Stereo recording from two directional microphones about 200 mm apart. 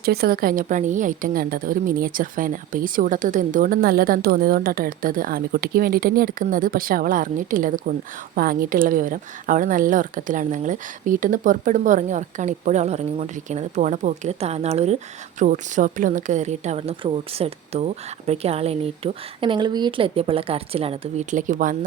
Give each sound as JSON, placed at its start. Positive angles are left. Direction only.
{"t": 0.0, "sound": "a woman's voice", "side_deg": -50}